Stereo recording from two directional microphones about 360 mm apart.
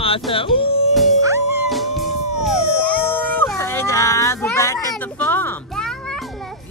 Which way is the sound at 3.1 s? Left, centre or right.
Centre.